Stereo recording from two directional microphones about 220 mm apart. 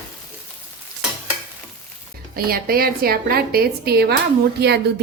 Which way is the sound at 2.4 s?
40° right (ahead or behind).